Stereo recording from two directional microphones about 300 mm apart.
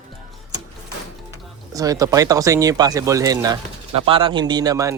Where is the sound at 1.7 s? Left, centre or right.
Centre.